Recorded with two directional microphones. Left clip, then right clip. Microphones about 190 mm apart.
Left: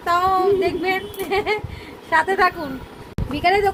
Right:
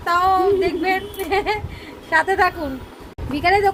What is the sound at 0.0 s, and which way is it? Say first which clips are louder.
A woman's voice: right 1 dB; 5° left (ahead or behind).